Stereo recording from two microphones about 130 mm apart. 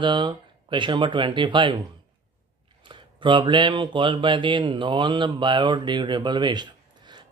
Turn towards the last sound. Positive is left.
turn(degrees=-35)  # may be behind; listen again after turning